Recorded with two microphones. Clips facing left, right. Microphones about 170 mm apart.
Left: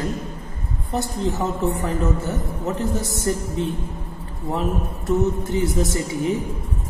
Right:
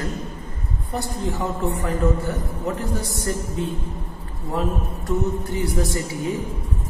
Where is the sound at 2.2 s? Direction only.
25° left (ahead or behind).